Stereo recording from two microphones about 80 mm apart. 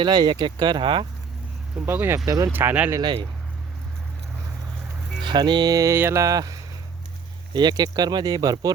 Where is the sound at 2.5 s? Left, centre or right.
Right.